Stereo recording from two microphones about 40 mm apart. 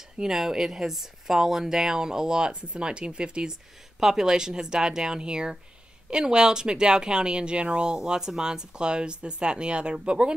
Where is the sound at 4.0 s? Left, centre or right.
Centre.